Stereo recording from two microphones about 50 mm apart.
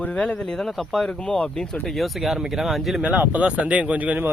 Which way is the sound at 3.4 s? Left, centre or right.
Right.